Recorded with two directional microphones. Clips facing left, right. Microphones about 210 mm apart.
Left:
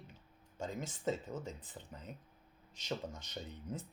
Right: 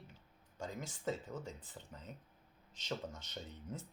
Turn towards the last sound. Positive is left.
turn(degrees=15)  # may be behind; listen again after turning